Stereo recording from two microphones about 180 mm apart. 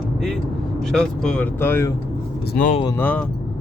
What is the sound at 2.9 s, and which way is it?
Speech, 10° left (ahead or behind).